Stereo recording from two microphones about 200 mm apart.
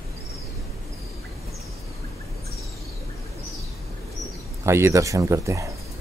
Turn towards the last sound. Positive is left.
turn(degrees=-15)  # may be behind; listen again after turning